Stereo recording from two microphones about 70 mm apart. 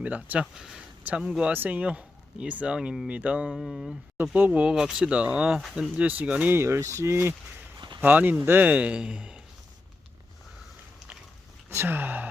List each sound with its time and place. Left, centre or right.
0.0 s a man's voice: right
0.5 s speech: centre
1.5 s speech: right; by 3.1 s centre
3.1 s a man's voice: centre
3.5 s speech: centre
4.4 s speech: centre
5.5 s speech: centre
6.0 s a man's voice: right
6.5 s speech: right
8.0 s a man's voice: right
11.7 s a man's voice: right